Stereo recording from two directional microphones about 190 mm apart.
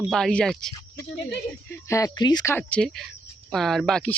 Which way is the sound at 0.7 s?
15° left (ahead or behind).